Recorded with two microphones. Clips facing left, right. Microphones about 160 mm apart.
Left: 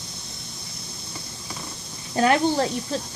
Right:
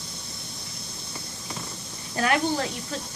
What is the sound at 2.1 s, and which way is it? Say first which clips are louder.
Speech: left 5 dB; 25° left (ahead or behind).